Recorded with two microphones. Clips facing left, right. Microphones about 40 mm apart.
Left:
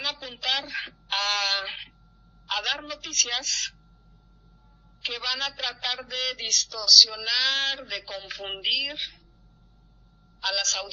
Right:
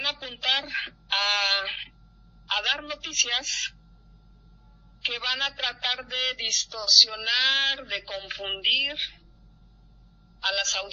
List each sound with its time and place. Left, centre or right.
0.0 s a sound: right
5.0 s a man's voice: right
10.4 s a man's voice: right